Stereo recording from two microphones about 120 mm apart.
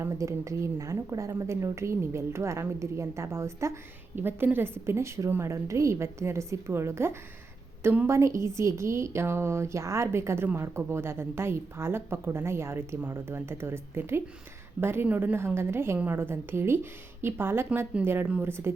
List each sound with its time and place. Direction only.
0.0 s a woman's voice: 25° right (ahead or behind)